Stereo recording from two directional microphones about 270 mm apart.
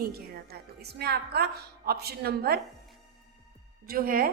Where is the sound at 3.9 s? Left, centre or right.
Right.